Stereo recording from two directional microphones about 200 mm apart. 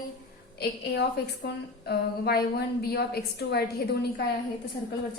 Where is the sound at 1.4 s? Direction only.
55° left (ahead or behind).